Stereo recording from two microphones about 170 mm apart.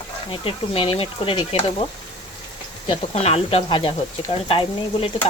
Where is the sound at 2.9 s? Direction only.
35° left (ahead or behind).